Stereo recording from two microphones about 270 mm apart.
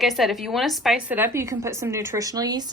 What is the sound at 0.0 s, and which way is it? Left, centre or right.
A woman's voice, centre.